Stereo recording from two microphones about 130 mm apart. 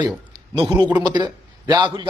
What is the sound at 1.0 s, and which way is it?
Speech, 35° right (ahead or behind).